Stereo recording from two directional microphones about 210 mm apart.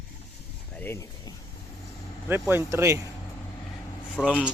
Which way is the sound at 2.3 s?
10° right (ahead or behind).